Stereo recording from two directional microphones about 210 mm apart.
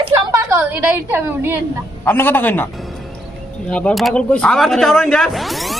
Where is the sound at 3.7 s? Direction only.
5° left (ahead or behind).